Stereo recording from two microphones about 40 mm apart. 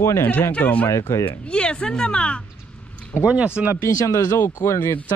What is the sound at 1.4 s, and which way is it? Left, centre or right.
Speech, left.